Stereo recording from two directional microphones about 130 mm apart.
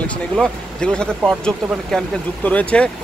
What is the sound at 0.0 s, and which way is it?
Speech, 10° left (ahead or behind).